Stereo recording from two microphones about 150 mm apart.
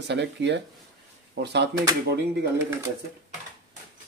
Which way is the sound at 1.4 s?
90° right.